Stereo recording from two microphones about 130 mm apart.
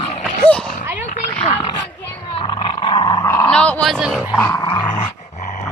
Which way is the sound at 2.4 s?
40° left (ahead or behind).